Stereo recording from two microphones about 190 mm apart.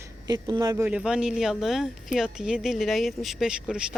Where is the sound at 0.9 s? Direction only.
5° right (ahead or behind).